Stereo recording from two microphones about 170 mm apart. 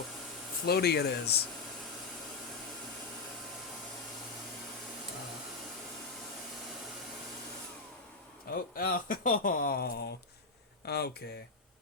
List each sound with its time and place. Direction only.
0.6 s speech: 70° left (ahead or behind)
8.4 s speech: 55° left (ahead or behind); by 11.1 s 70° left (ahead or behind)